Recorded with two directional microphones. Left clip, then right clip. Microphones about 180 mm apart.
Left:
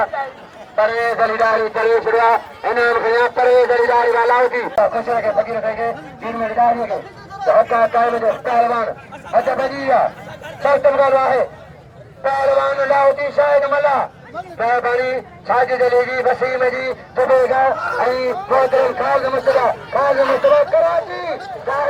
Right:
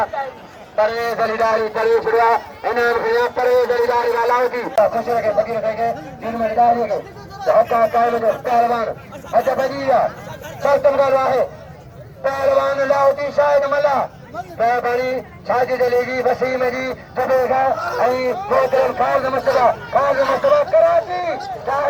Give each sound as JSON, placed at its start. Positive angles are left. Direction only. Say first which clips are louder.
{"t": 0.0, "sound": "a sound", "louder": "left 1 dB", "side_deg": 15}
{"t": 0.8, "sound": "a man's voice", "louder": "left 2 dB", "side_deg": 10}
{"t": 17.7, "sound": "speech", "louder": "left 2 dB", "side_deg": 0}
{"t": 18.0, "sound": "speech", "louder": "right 2 dB", "side_deg": 40}
{"t": 20.2, "sound": "speech", "louder": "left 2 dB", "side_deg": 0}
{"t": 20.5, "sound": "speech", "louder": "even", "side_deg": 45}